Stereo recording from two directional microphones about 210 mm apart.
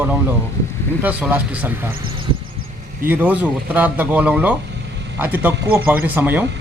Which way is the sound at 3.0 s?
10° right (ahead or behind).